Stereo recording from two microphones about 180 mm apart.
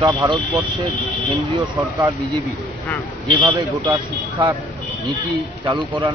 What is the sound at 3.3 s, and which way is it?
Speech, 20° right (ahead or behind).